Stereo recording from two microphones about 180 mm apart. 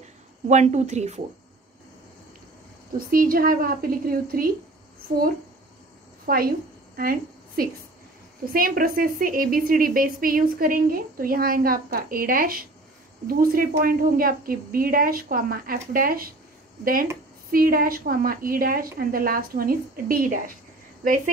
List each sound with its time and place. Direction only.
0.5 s a woman's voice: 40° right (ahead or behind)
3.0 s a woman's voice: 50° right (ahead or behind)
6.2 s a woman's voice: 55° right (ahead or behind)